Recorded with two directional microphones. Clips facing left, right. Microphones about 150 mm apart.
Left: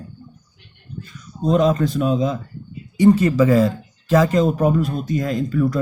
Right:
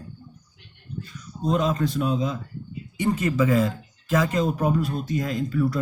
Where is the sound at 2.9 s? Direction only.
35° left (ahead or behind).